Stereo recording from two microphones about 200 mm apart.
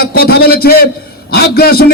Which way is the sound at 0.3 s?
50° left (ahead or behind).